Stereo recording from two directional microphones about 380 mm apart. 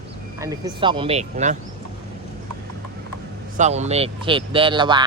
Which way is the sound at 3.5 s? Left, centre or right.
Centre.